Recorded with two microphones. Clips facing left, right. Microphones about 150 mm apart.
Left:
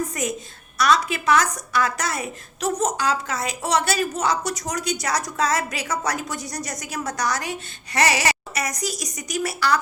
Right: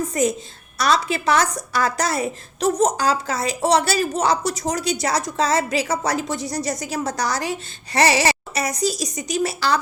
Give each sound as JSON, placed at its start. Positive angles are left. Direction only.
{"t": 0.1, "sound": "a woman's voice", "side_deg": -30}